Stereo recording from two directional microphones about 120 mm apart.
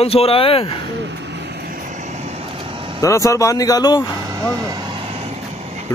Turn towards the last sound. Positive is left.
turn(degrees=-60)  # may be behind; listen again after turning